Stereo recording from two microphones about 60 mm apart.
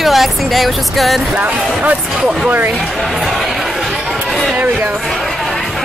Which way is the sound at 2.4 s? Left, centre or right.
Right.